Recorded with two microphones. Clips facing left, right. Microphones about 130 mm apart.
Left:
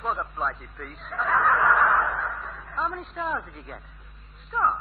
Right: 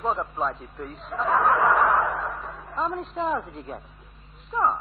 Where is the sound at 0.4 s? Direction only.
20° right (ahead or behind).